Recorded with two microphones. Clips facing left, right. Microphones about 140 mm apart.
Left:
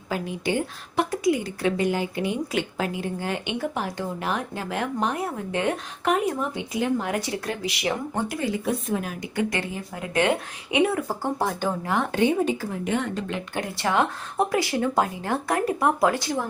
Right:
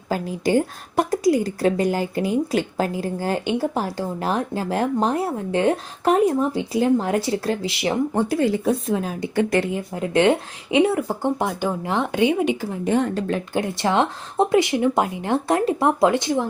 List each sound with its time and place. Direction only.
0.1 s a woman's voice: 40° right (ahead or behind); by 12.6 s 15° right (ahead or behind)
12.8 s speech: 35° right (ahead or behind)